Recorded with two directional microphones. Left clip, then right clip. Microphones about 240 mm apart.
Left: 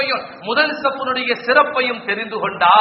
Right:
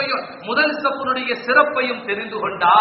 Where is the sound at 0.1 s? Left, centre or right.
Left.